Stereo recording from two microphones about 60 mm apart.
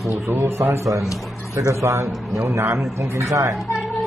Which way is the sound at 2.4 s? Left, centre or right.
Right.